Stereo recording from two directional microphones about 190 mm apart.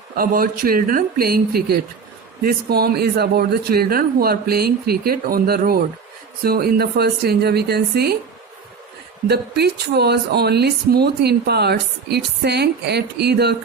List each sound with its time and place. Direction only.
0.2 s speech: 50° right (ahead or behind)
9.2 s speech: 60° right (ahead or behind)